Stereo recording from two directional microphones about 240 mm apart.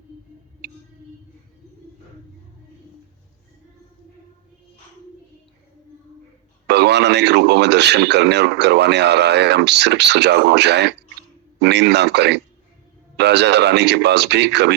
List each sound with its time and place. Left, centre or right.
6.7 s speech: right